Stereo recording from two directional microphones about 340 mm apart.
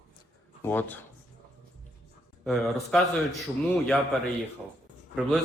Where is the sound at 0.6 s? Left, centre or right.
Centre.